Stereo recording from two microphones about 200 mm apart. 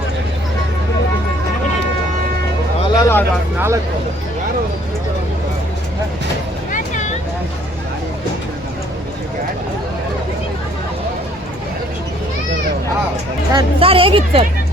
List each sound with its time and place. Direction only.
2.9 s a sound: 15° left (ahead or behind)
6.7 s vehicle: 40° left (ahead or behind)
13.5 s a woman's voice: 25° right (ahead or behind)